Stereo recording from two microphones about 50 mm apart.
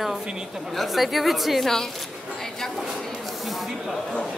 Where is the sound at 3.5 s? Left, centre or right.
Centre.